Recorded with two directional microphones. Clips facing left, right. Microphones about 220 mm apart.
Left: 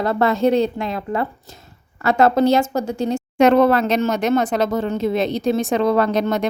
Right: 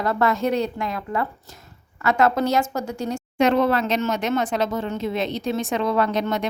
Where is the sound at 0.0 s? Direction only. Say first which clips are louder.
Left 4 dB; 30° left (ahead or behind).